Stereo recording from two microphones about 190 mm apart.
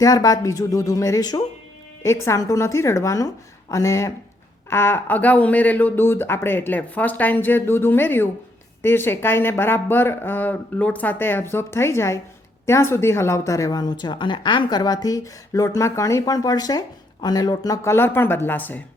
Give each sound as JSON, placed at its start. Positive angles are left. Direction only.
{"t": 0.0, "sound": "a woman's voice", "side_deg": 20}